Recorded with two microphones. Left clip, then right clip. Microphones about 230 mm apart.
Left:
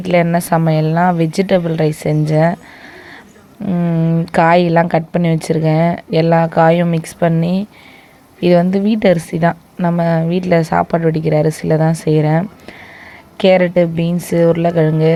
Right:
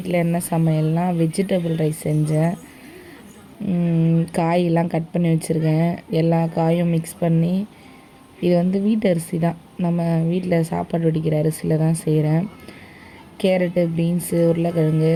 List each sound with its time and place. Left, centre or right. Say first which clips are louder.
0.0 s speech: left 8 dB; left
3.7 s a woman's voice: left 4 dB; centre
11.4 s speech: left 6 dB; left
12.0 s a woman's voice: left 7 dB; left